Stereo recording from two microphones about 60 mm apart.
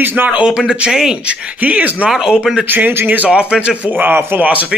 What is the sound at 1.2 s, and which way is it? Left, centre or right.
Speech, right.